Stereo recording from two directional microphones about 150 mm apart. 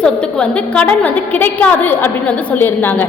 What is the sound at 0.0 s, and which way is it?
A woman's voice, 5° left (ahead or behind).